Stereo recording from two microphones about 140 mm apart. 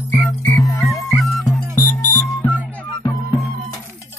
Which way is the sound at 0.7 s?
25° left (ahead or behind).